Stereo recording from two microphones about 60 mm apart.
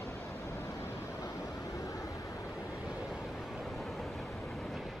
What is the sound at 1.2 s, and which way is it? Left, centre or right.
Waves, left.